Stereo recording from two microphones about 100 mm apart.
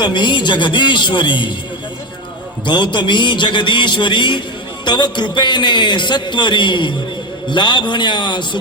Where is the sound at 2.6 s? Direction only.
50° left (ahead or behind).